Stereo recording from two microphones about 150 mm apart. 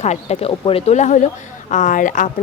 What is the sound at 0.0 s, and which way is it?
Speech, 45° left (ahead or behind).